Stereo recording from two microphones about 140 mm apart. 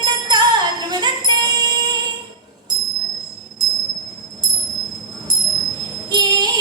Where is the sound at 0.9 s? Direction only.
30° right (ahead or behind).